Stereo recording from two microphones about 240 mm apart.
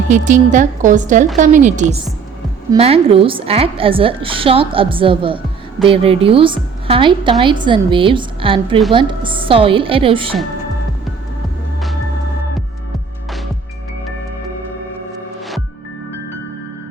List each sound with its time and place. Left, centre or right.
0.1 s a woman's voice: right